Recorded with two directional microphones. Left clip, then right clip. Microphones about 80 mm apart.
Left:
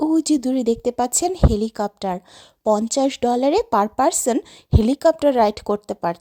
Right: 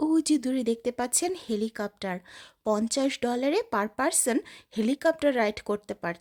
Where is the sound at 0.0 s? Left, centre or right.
Left.